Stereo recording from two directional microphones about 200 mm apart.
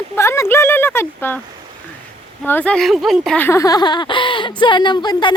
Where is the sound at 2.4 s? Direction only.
10° left (ahead or behind).